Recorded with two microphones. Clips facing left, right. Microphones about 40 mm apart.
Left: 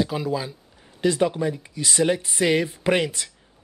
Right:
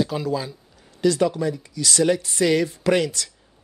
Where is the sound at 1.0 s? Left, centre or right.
Left.